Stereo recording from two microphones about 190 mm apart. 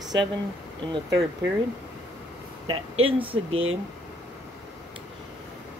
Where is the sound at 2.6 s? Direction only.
30° right (ahead or behind).